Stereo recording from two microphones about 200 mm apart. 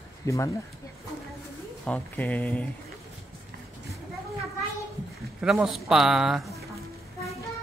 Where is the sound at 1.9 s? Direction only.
5° left (ahead or behind).